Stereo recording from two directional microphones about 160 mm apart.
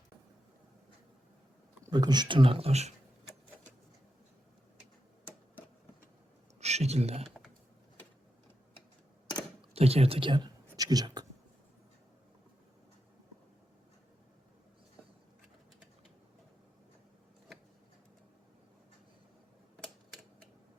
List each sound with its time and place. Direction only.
1.9 s speech: 25° right (ahead or behind)
6.6 s speech: 40° right (ahead or behind)
9.6 s speech: 40° right (ahead or behind)